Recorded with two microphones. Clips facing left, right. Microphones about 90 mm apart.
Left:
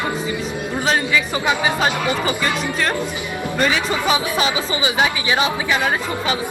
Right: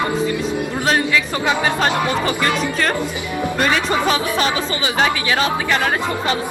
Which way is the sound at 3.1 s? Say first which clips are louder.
Right 3 dB; 20° right (ahead or behind).